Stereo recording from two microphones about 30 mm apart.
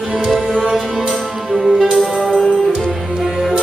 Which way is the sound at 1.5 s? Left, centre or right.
Centre.